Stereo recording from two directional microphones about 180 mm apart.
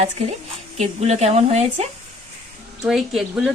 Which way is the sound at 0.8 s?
35° right (ahead or behind).